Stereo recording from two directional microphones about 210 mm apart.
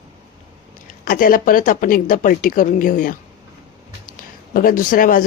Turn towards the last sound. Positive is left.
turn(degrees=40)  # may be behind; listen again after turning